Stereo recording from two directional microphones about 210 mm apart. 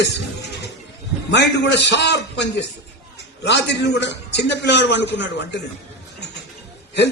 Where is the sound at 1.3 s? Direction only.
55° left (ahead or behind).